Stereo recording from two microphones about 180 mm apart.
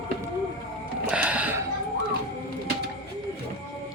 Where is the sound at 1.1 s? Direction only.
5° right (ahead or behind).